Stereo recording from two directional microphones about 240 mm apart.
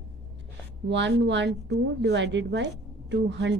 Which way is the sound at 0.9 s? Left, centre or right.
Right.